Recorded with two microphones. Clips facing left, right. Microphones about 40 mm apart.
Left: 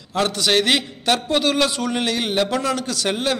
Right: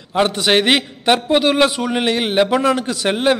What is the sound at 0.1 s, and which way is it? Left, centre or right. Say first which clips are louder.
A man's voice: right 4 dB; right.